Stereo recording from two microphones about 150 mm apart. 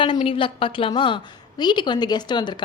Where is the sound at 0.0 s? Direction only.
35° left (ahead or behind).